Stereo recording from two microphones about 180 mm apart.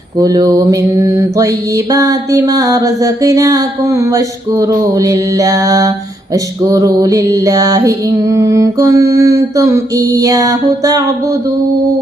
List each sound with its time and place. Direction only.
0.2 s mantra: 20° right (ahead or behind)